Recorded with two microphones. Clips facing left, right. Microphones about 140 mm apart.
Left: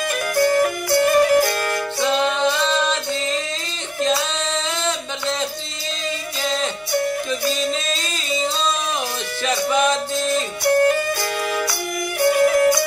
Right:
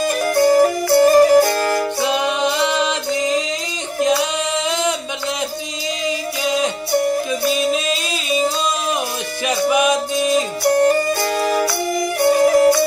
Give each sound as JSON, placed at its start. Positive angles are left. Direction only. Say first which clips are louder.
{"t": 0.0, "sound": "music", "louder": "right 4 dB", "side_deg": -35}
{"t": 2.0, "sound": "music", "louder": "right 1 dB", "side_deg": -15}
{"t": 6.4, "sound": "music", "louder": "right 4 dB", "side_deg": -15}
{"t": 9.5, "sound": "music", "louder": "right 3 dB", "side_deg": -15}
{"t": 10.9, "sound": "music", "louder": "right 4 dB", "side_deg": -35}